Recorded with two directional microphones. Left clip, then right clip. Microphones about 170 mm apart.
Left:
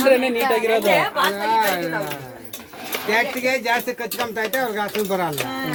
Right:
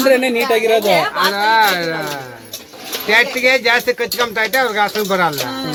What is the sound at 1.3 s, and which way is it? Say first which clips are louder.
Speech: right 6 dB; 30° right (ahead or behind).